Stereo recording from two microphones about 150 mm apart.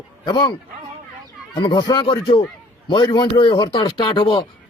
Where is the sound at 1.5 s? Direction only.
30° left (ahead or behind).